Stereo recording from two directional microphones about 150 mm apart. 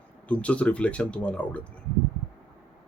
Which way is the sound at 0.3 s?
10° left (ahead or behind).